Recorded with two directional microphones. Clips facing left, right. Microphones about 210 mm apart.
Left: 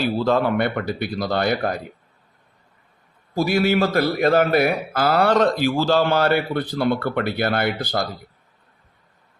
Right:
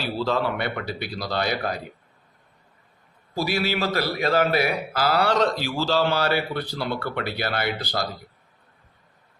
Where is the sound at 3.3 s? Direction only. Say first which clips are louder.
Left 6 dB; 50° left (ahead or behind).